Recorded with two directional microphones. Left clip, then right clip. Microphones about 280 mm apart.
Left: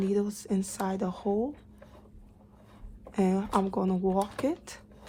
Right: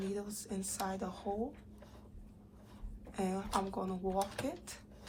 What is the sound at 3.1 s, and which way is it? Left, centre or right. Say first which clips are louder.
A woman's voice: left 9 dB; left.